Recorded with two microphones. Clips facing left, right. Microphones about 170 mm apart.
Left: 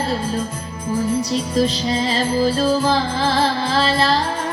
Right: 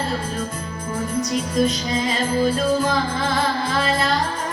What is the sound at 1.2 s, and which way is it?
Music, 30° left (ahead or behind).